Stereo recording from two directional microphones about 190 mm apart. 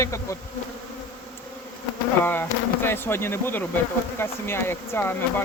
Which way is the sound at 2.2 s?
10° left (ahead or behind).